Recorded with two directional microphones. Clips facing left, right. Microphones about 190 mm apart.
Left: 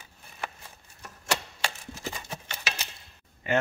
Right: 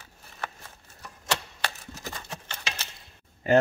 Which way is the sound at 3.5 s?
40° right (ahead or behind).